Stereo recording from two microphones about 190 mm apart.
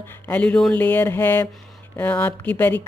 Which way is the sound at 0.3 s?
5° left (ahead or behind).